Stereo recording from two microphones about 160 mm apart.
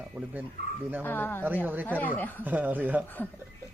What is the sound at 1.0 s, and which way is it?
Speech, 10° left (ahead or behind).